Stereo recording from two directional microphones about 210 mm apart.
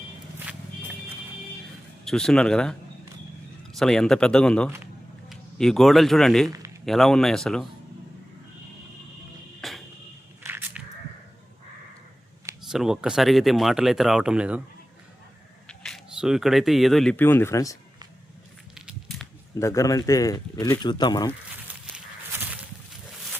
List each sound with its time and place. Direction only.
2.0 s speech: 5° left (ahead or behind)
3.8 s a man's voice: centre (ahead or behind)
9.6 s music: centre (ahead or behind)
10.4 s biting: 10° right (ahead or behind)
12.6 s speech: centre (ahead or behind)
15.6 s speech: centre (ahead or behind)
18.7 s a sound: centre (ahead or behind)
19.5 s speech: 15° left (ahead or behind)
21.9 s walk: 5° right (ahead or behind)